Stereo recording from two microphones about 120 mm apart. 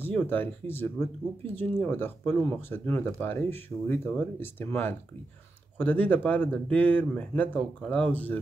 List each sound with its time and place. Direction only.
0.0 s speech: 15° left (ahead or behind)